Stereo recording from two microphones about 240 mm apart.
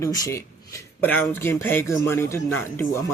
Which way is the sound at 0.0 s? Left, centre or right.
Centre.